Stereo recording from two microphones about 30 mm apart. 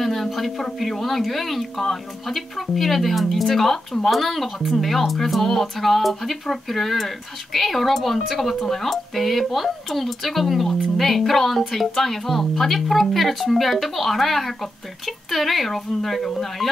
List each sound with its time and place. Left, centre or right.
0.0 s a sound: centre
0.7 s speech: centre
1.8 s speech: centre
2.3 s speech: centre